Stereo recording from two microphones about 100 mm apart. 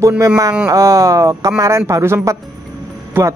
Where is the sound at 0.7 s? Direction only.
30° right (ahead or behind).